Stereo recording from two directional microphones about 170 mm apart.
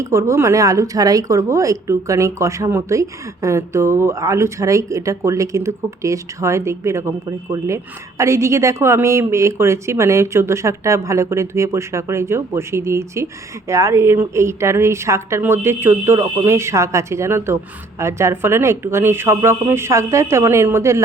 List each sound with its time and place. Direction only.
0.0 s a woman's voice: 20° right (ahead or behind)